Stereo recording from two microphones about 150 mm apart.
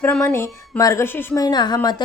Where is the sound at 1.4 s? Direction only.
30° left (ahead or behind).